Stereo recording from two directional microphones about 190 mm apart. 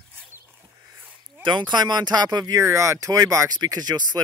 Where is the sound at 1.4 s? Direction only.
25° right (ahead or behind).